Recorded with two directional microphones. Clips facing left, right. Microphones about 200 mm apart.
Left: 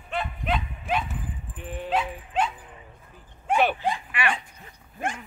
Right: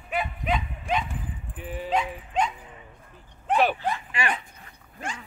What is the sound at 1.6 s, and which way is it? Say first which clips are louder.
Dog: even; 5° right (ahead or behind).